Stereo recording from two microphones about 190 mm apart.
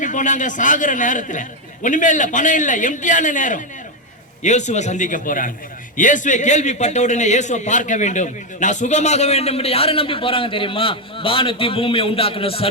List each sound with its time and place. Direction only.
0.0 s a man's voice: 40° left (ahead or behind)